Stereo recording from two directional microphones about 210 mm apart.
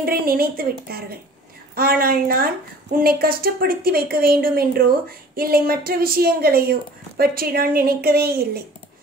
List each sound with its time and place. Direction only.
0.0 s a woman's voice: 45° right (ahead or behind)